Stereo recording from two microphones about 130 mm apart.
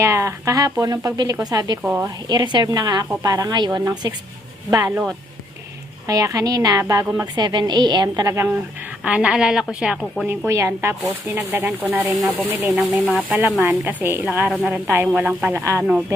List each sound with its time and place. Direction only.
0.0 s speech: 20° right (ahead or behind)
1.8 s speech: 10° right (ahead or behind)
2.0 s a woman's voice: 35° right (ahead or behind)
6.1 s a woman's voice: 25° right (ahead or behind)
9.0 s a woman's voice: 10° right (ahead or behind)
10.2 s speech: 20° right (ahead or behind)
15.1 s a woman's voice: centre (ahead or behind)